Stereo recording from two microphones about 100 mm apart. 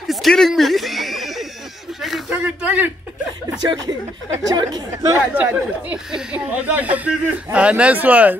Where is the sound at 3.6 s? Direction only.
40° right (ahead or behind).